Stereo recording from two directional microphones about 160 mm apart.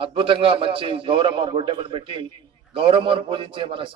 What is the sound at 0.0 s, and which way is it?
A man's voice, 35° right (ahead or behind).